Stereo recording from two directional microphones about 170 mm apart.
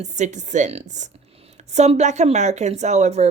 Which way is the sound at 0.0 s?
45° right (ahead or behind).